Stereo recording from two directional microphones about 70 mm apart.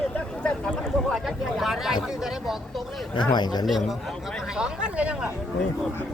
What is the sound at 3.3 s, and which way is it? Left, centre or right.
Speech, left.